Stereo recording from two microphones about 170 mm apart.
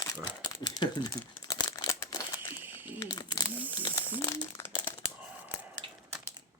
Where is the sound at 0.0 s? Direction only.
25° left (ahead or behind).